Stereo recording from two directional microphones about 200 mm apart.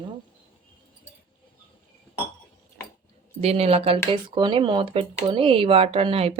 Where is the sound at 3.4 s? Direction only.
30° right (ahead or behind).